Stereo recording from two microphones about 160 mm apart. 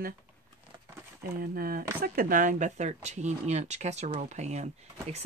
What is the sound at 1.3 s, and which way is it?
Speech, 65° right (ahead or behind).